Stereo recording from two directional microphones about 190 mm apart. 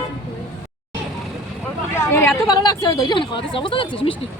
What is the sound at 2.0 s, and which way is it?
Speech, 15° left (ahead or behind).